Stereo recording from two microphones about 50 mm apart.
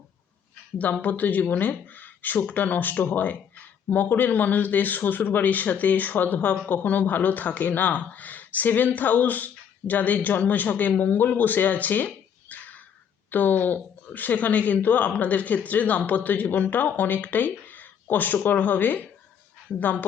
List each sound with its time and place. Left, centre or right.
1.0 s speech: left